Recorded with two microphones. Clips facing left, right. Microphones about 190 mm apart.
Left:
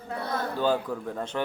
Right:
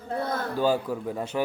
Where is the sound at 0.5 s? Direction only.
10° right (ahead or behind).